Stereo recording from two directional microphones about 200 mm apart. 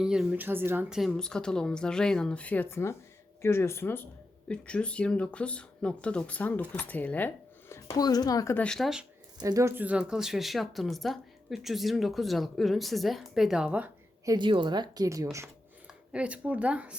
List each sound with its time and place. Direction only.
0.0 s speech: 5° right (ahead or behind)
9.4 s speech: 15° right (ahead or behind)
14.3 s speech: 25° right (ahead or behind); by 16.9 s 5° right (ahead or behind)